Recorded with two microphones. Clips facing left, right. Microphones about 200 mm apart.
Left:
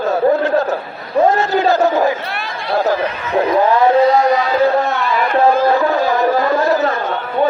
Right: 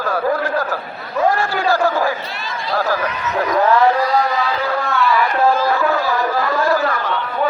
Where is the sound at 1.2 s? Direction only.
20° left (ahead or behind).